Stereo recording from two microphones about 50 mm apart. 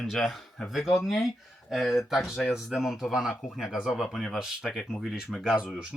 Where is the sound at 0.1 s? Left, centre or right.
Centre.